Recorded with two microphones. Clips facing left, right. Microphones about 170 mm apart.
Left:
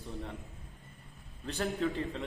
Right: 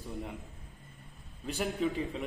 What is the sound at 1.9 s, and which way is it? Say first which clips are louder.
Speech: right 1 dB; 5° right (ahead or behind).